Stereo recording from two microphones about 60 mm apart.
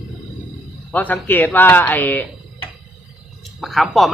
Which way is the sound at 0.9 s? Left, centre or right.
Left.